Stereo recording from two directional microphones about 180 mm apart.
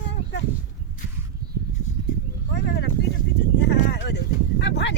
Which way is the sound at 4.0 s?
75° left (ahead or behind).